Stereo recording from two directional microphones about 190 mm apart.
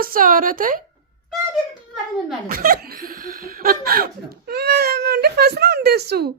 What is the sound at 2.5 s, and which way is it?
Speech, 50° right (ahead or behind).